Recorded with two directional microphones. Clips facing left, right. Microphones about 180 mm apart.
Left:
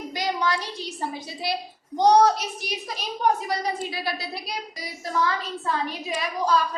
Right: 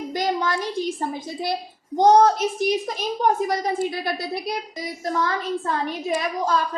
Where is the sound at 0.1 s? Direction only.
50° right (ahead or behind).